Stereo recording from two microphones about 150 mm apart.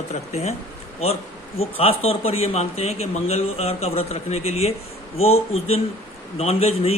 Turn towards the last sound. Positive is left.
turn(degrees=45)  # may be behind; listen again after turning